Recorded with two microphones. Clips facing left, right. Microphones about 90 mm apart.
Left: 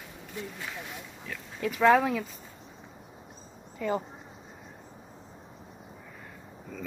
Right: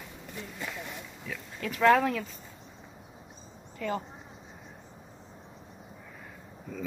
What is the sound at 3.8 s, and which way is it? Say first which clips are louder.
Speech: left 3 dB; 5° left (ahead or behind).